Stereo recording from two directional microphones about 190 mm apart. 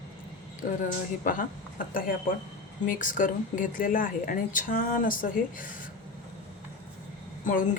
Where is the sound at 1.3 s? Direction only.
45° left (ahead or behind).